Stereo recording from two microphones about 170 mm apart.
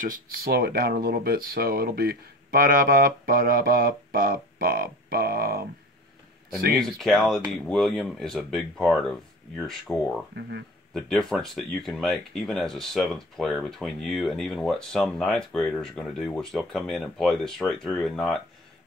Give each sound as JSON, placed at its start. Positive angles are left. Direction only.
{"t": 0.0, "sound": "speech", "side_deg": -65}
{"t": 6.8, "sound": "speech", "side_deg": 0}